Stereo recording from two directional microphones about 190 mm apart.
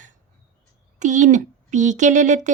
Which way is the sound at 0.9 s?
40° right (ahead or behind).